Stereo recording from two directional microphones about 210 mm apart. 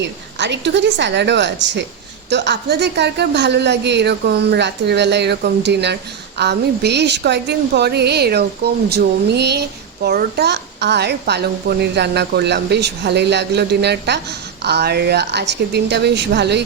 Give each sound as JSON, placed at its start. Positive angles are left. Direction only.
{"t": 0.0, "sound": "a woman's voice", "side_deg": -55}